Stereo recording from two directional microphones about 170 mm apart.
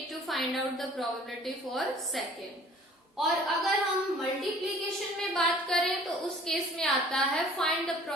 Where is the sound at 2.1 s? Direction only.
Centre (ahead or behind).